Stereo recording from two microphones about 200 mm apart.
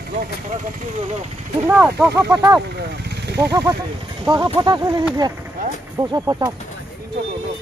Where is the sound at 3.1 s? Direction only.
55° right (ahead or behind).